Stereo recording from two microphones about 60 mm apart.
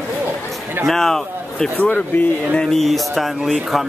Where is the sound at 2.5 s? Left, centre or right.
Centre.